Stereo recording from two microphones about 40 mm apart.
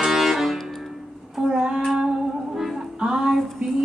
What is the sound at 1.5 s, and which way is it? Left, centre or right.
Child singing, centre.